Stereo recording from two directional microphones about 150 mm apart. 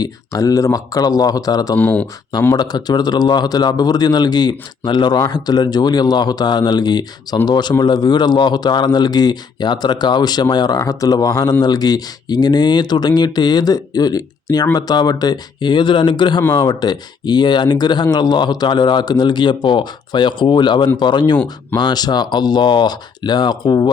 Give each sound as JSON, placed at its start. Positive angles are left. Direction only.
{"t": 0.0, "sound": "speech", "side_deg": 25}
{"t": 1.7, "sound": "speech", "side_deg": 10}
{"t": 2.6, "sound": "speech", "side_deg": 30}